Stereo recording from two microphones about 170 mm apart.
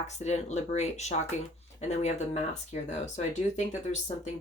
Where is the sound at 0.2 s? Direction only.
40° left (ahead or behind).